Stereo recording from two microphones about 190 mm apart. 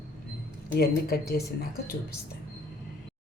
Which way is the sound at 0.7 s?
55° left (ahead or behind).